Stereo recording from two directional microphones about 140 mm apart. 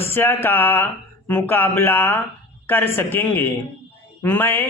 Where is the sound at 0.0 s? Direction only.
15° left (ahead or behind).